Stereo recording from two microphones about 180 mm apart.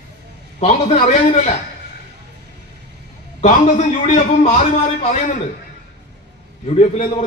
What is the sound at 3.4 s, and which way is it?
A man's voice, 40° left (ahead or behind).